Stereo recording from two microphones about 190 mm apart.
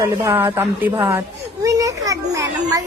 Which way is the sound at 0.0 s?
15° right (ahead or behind).